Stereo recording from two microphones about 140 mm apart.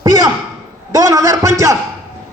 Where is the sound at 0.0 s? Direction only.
30° right (ahead or behind).